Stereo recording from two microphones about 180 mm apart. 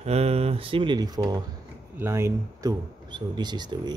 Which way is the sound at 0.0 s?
35° right (ahead or behind).